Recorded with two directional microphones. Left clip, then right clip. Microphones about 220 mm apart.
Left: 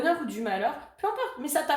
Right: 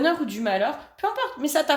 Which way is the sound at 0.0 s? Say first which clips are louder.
Right 4 dB; 45° right (ahead or behind).